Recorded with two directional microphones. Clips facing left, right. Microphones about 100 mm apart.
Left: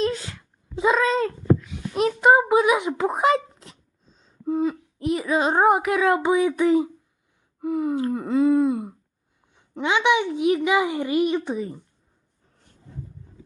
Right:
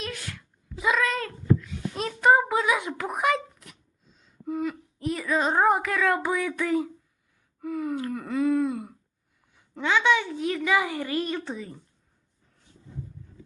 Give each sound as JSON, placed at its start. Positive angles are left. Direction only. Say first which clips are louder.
{"t": 0.0, "sound": "a sound", "louder": "left 11 dB", "side_deg": 25}
{"t": 5.3, "sound": "speech", "louder": "left 2 dB", "side_deg": 5}
{"t": 5.8, "sound": "a child's voice", "louder": "left 5 dB", "side_deg": 20}